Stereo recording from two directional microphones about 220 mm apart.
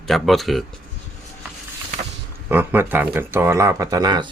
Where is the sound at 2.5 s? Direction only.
10° right (ahead or behind).